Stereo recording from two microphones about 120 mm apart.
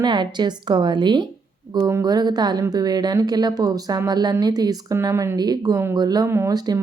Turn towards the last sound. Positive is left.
turn(degrees=-20)  # may be behind; listen again after turning